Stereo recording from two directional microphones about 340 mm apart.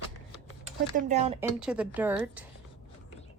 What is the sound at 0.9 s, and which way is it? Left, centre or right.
Speech, centre.